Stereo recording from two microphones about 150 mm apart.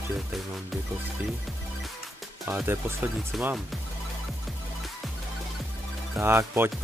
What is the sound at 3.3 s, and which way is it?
Speech, 5° right (ahead or behind).